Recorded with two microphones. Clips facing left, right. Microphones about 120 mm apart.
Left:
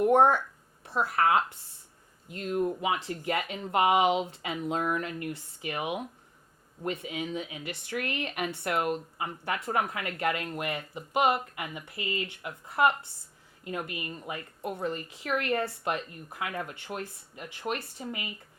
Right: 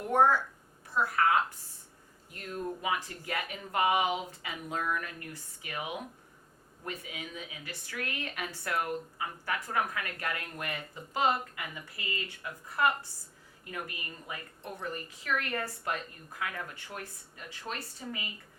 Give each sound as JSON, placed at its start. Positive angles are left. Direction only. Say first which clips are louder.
{"t": 0.0, "sound": "speech", "louder": "left 4 dB", "side_deg": 20}
{"t": 0.9, "sound": "a sound", "louder": "left 1 dB", "side_deg": 20}
{"t": 2.3, "sound": "a woman's voice", "louder": "left 8 dB", "side_deg": 20}